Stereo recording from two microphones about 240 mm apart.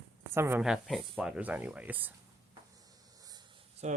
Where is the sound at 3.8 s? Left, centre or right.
Right.